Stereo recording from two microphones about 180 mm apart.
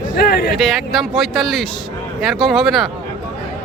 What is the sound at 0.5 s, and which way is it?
Speech, centre (ahead or behind).